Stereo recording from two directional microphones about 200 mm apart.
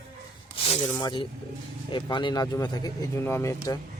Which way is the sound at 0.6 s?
30° left (ahead or behind).